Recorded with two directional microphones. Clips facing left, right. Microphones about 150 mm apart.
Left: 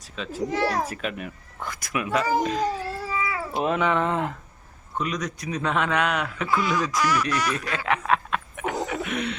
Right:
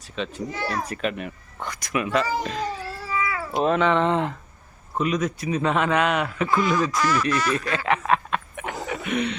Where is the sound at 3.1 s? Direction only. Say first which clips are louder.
Right 3 dB; 20° left (ahead or behind).